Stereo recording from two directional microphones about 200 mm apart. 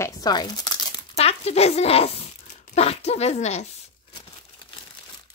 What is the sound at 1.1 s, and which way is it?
A woman's voice, 30° left (ahead or behind).